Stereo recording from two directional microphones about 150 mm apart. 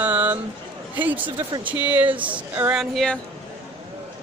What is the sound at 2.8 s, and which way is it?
Speech, 5° left (ahead or behind).